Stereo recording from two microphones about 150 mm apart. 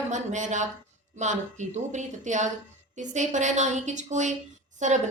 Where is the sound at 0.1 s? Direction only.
55° right (ahead or behind).